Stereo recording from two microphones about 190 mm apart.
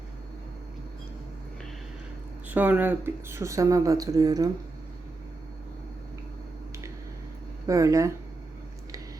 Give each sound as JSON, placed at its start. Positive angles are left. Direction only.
{"t": 2.5, "sound": "speech", "side_deg": -10}
{"t": 7.7, "sound": "speech", "side_deg": -15}